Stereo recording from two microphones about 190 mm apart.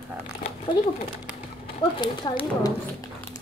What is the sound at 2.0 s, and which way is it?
Speech, 20° left (ahead or behind).